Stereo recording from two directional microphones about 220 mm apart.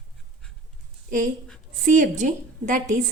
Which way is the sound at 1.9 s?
35° right (ahead or behind).